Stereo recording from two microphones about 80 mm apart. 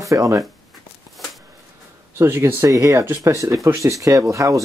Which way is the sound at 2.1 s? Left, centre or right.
Right.